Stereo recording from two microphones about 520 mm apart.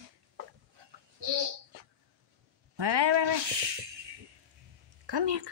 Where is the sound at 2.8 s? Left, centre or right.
Right.